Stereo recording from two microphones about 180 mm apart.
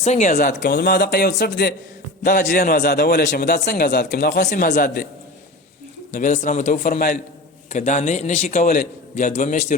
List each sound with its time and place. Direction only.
0.0 s a man's voice: 40° left (ahead or behind)
0.6 s speech: 65° left (ahead or behind)
2.2 s a man's voice: 50° left (ahead or behind); by 4.4 s 65° left (ahead or behind)
4.4 s a man's voice: 55° left (ahead or behind)
6.1 s a man's voice: 45° left (ahead or behind)
7.7 s a man's voice: 40° left (ahead or behind)